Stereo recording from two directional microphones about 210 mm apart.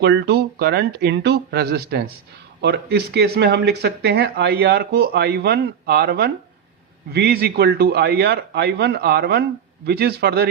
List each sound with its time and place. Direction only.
0.0 s speech: 55° right (ahead or behind)